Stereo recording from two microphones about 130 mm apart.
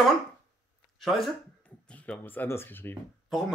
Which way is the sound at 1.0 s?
Centre (ahead or behind).